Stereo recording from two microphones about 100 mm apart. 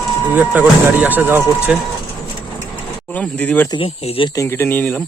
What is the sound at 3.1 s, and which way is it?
Speech, 15° left (ahead or behind).